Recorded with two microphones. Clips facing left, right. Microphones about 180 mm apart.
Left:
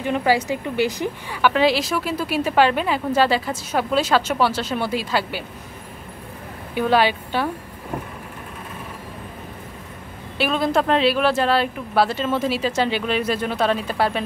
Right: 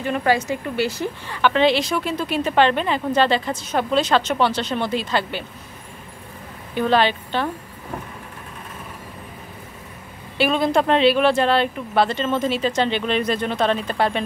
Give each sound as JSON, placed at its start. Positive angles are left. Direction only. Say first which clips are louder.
{"t": 0.0, "sound": "a woman's voice", "louder": "even", "side_deg": 15}
{"t": 6.7, "sound": "a woman's voice", "louder": "even", "side_deg": 10}
{"t": 10.3, "sound": "speech", "louder": "right 2 dB", "side_deg": 0}